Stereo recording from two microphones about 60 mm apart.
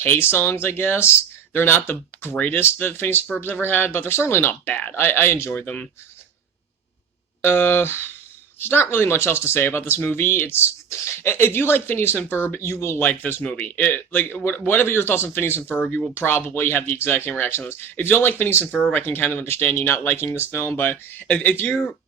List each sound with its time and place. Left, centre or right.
0.0 s speech: left
2.3 s speech: left
7.4 s speech: left
13.0 s speech: left